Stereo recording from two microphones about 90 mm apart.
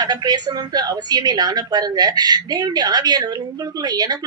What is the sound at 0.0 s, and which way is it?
A woman's voice, 45° right (ahead or behind).